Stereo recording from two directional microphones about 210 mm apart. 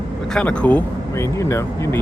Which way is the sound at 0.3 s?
5° left (ahead or behind).